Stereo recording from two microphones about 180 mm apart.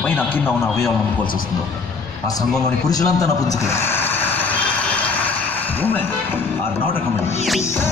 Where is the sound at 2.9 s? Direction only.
20° left (ahead or behind).